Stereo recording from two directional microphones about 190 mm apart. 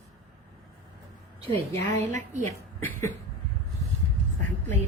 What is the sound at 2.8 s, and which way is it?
Speech, 10° left (ahead or behind).